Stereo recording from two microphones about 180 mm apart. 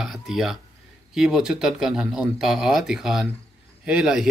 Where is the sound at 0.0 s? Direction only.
Centre (ahead or behind).